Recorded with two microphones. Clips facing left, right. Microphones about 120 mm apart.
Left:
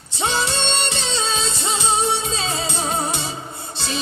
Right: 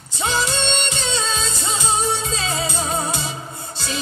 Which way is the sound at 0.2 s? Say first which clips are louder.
Even; 30° left (ahead or behind).